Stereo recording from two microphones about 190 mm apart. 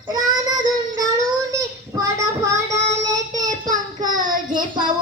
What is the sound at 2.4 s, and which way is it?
Child singing, 15° right (ahead or behind).